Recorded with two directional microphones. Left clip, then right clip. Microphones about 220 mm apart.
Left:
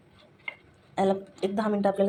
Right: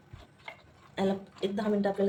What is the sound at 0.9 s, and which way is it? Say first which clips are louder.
Speech: left 6 dB; 10° left (ahead or behind).